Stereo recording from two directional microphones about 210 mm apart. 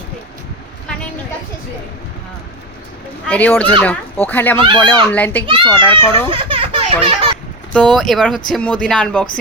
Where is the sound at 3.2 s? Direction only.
5° left (ahead or behind).